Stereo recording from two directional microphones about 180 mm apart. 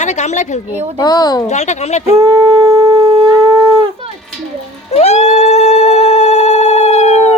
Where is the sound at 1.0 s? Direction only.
20° left (ahead or behind).